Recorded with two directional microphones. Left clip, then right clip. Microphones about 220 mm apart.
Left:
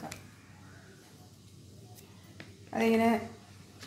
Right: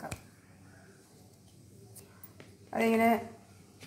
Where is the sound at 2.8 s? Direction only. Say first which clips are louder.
Right 1 dB; 15° right (ahead or behind).